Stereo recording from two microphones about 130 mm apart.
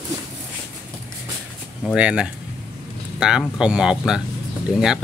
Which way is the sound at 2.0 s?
10° right (ahead or behind).